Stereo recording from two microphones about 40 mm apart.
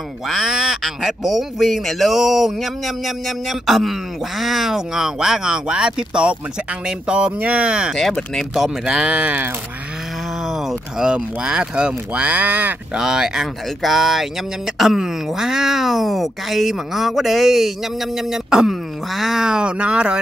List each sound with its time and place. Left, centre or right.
0.3 s speech: centre; by 7.9 s right
7.9 s speech: centre
8.6 s speech: centre
10.4 s a sound: centre
11.4 s speech: right
12.9 s speech: centre
15.2 s speech: centre
19.4 s speech: right